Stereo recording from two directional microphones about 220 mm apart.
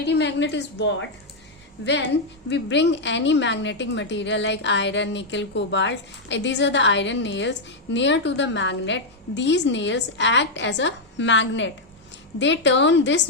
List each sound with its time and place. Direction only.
0.0 s a woman's voice: 50° left (ahead or behind)